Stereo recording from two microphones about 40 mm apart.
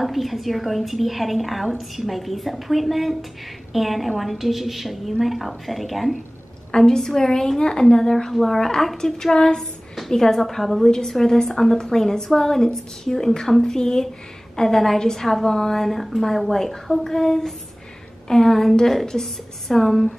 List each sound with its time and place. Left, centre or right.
0.0 s a woman's voice: centre
6.7 s a woman's voice: centre